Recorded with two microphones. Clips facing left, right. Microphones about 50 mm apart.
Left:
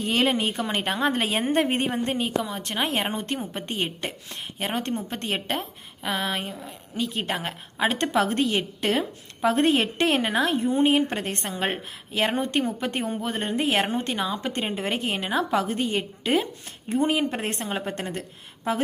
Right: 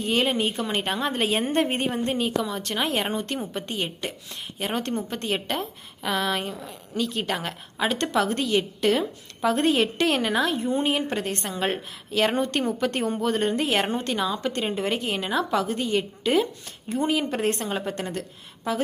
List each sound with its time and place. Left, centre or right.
0.0 s a woman's voice: left
1.5 s a woman's voice: left
1.7 s a woman's voice: left
6.0 s a woman's voice: left
13.0 s a woman's voice: centre
13.3 s a woman's voice: centre